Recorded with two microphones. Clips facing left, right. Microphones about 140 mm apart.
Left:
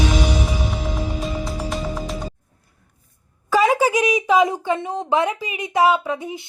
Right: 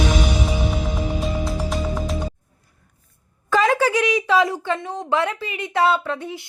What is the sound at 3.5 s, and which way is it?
A woman's voice, 10° left (ahead or behind).